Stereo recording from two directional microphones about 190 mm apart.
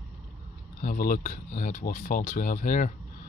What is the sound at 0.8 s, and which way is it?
Speech, 45° left (ahead or behind).